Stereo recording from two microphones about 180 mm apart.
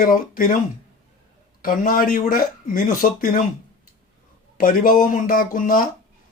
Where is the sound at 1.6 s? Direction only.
50° left (ahead or behind).